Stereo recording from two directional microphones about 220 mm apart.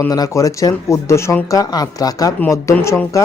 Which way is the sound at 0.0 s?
15° left (ahead or behind).